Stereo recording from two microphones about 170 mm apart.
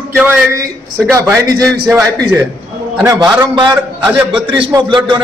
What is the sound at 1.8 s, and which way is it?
Speech, 5° right (ahead or behind).